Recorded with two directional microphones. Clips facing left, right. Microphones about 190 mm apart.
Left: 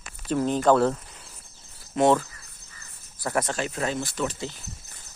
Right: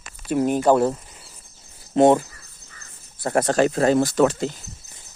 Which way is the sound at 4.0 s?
85° right.